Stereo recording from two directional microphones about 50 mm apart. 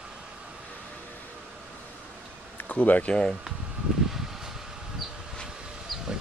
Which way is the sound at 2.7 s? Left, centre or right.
Left.